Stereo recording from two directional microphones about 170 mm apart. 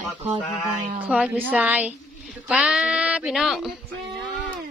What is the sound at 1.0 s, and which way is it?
Speech, 5° right (ahead or behind).